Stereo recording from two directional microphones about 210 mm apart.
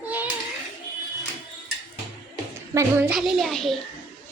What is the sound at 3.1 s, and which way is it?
Speech, centre (ahead or behind).